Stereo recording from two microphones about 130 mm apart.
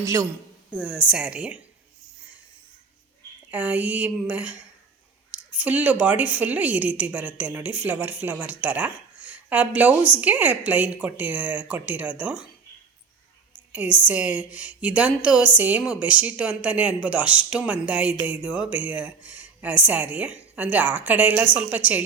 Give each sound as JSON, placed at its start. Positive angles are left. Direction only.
{"t": 0.0, "sound": "speech", "side_deg": -25}
{"t": 0.7, "sound": "speech", "side_deg": -10}
{"t": 3.5, "sound": "speech", "side_deg": -10}
{"t": 14.0, "sound": "speech", "side_deg": -10}